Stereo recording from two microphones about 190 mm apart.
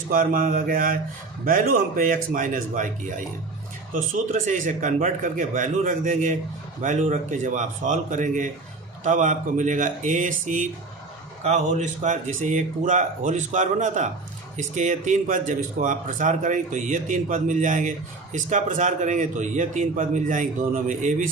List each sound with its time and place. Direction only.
0.1 s a man's voice: 45° right (ahead or behind)
3.9 s speech: 40° right (ahead or behind)